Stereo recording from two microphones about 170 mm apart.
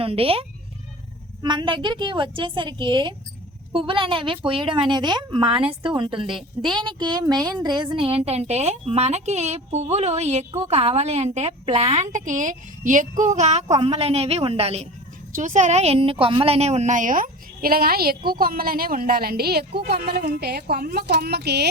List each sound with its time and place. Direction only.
0.0 s a woman's voice: 35° right (ahead or behind)
15.4 s a woman's voice: 45° right (ahead or behind); by 21.7 s 75° right (ahead or behind)